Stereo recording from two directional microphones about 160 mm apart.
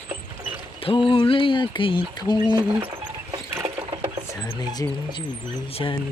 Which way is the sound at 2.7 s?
35° right (ahead or behind).